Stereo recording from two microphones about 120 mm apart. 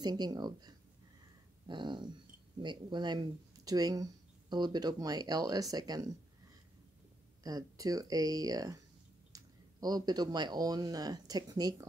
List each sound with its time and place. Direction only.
0.0 s speech: 35° right (ahead or behind)
7.4 s speech: 30° right (ahead or behind)